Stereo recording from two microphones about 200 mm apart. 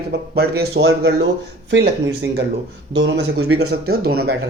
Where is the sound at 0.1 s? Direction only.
55° right (ahead or behind).